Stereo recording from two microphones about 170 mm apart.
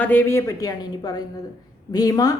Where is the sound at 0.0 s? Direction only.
10° left (ahead or behind).